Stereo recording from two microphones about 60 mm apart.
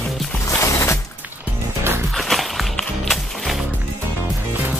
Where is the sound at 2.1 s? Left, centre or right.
Centre.